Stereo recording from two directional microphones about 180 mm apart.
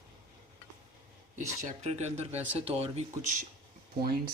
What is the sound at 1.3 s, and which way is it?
Speech, 40° right (ahead or behind).